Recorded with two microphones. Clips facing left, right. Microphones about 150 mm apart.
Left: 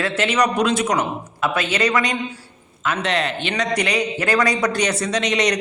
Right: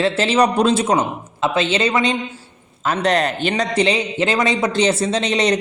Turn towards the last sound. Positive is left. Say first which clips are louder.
# right 2 dB
turn(degrees=-30)  # may be behind; listen again after turning